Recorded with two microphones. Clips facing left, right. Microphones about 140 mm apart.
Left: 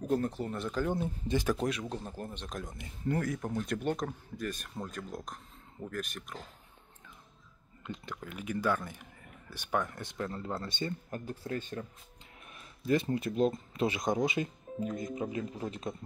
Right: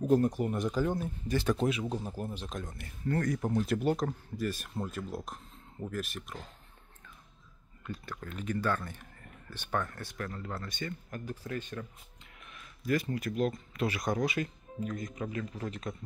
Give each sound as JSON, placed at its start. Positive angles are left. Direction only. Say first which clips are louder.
{"t": 0.0, "sound": "speech", "louder": "right 5 dB", "side_deg": -10}
{"t": 0.9, "sound": "speech", "louder": "left 1 dB", "side_deg": 25}
{"t": 1.4, "sound": "speech", "louder": "right 2 dB", "side_deg": 0}
{"t": 2.6, "sound": "speech", "louder": "left 1 dB", "side_deg": 15}
{"t": 3.3, "sound": "speech", "louder": "right 4 dB", "side_deg": -5}
{"t": 7.8, "sound": "speech", "louder": "even", "side_deg": 20}